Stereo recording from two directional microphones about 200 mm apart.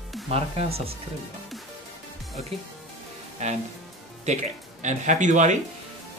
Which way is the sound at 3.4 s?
35° right (ahead or behind).